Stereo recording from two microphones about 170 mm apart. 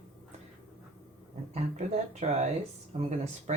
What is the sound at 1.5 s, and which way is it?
Speech, 40° right (ahead or behind).